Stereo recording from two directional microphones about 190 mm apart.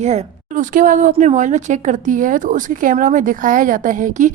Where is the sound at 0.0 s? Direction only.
35° right (ahead or behind).